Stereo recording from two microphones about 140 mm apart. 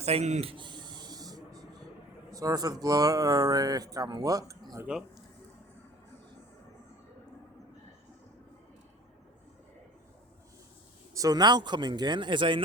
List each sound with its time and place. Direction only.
0.0 s speech: 50° right (ahead or behind)
0.5 s a sound: 35° right (ahead or behind)
2.3 s speech: 25° right (ahead or behind)
4.9 s speech: 5° right (ahead or behind)
11.1 s a man's voice: 25° right (ahead or behind)